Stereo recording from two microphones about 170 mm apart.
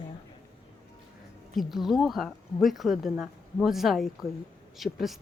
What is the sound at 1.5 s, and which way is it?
Speech, centre (ahead or behind).